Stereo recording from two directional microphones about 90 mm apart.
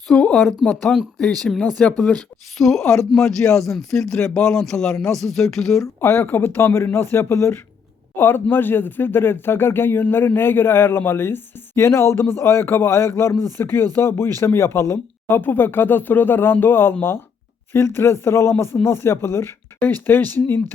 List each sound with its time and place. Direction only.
0.1 s speech: 5° left (ahead or behind)
5.8 s speech: 25° left (ahead or behind)